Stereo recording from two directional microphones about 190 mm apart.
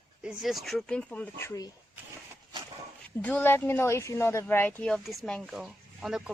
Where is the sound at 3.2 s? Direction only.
10° left (ahead or behind).